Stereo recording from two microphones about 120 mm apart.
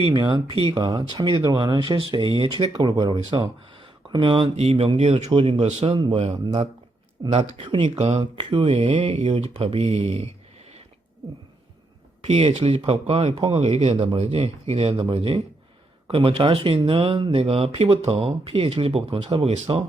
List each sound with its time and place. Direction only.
0.0 s speech: 45° right (ahead or behind)
2.8 s speech: 35° right (ahead or behind)
6.1 s speech: 55° right (ahead or behind)
6.4 s speech: 40° right (ahead or behind)
7.9 s speech: 65° right (ahead or behind)
8.2 s speech: 40° right (ahead or behind)
8.9 s speech: 70° right (ahead or behind)
12.2 s speech: 60° right (ahead or behind)
12.8 s speech: 55° right (ahead or behind)